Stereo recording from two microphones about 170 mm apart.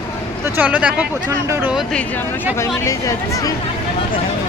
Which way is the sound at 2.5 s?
20° left (ahead or behind).